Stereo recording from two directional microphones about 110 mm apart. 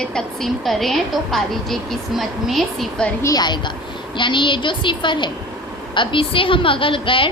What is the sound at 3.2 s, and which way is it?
A woman's voice, 35° left (ahead or behind).